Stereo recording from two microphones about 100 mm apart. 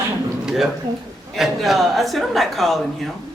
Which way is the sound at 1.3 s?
Centre (ahead or behind).